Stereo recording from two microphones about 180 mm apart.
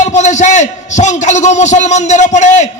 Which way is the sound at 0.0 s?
40° left (ahead or behind).